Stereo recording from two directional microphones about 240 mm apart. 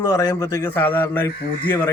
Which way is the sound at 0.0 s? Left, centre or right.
Centre.